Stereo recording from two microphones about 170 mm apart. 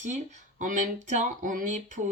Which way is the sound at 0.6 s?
50° right (ahead or behind).